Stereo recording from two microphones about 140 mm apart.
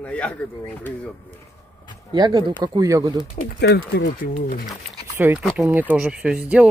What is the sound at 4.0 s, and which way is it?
Speech, 90° left.